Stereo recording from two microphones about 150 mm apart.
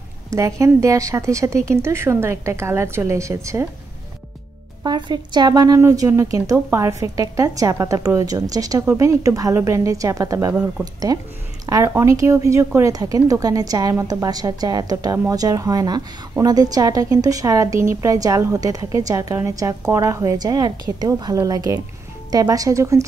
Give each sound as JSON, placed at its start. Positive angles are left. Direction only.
{"t": 0.3, "sound": "speech", "side_deg": -20}
{"t": 4.8, "sound": "speech", "side_deg": -30}
{"t": 11.6, "sound": "a sound", "side_deg": -25}
{"t": 11.9, "sound": "speech", "side_deg": -20}